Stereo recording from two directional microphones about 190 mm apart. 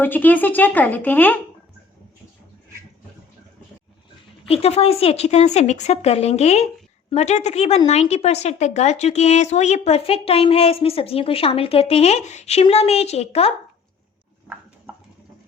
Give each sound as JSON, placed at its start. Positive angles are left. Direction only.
{"t": 0.0, "sound": "speech", "side_deg": 10}
{"t": 4.4, "sound": "a woman's voice", "side_deg": 30}